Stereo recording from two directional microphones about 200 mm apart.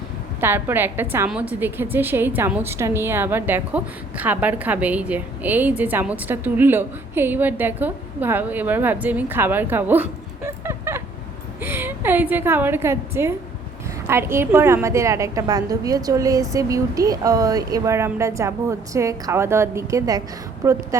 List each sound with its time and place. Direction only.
0.3 s a woman's voice: 10° right (ahead or behind)